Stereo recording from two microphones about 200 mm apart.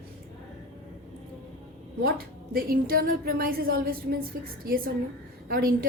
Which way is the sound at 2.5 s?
50° right (ahead or behind).